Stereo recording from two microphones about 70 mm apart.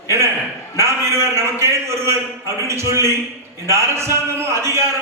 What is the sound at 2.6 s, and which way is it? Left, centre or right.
A man's voice, right.